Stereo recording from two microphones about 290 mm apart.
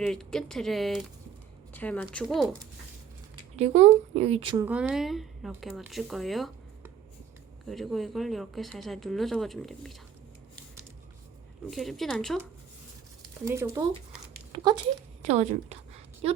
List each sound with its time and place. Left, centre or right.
0.0 s speech: centre
3.5 s speech: right
4.6 s speech: centre
11.7 s speech: centre
13.4 s a woman's voice: centre